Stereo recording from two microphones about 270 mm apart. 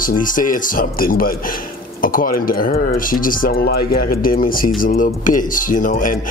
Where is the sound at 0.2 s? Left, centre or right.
Left.